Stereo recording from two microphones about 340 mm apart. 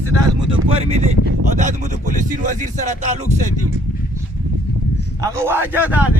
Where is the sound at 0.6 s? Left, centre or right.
Centre.